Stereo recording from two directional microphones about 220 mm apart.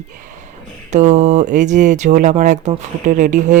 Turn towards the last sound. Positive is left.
turn(degrees=-35)  # may be behind; listen again after turning